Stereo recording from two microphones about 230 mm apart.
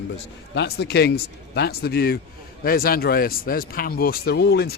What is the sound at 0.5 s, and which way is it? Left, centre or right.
Speech, left.